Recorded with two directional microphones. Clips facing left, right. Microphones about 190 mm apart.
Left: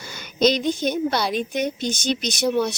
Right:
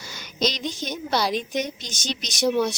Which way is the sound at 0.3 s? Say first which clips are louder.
Left 7 dB; 55° left (ahead or behind).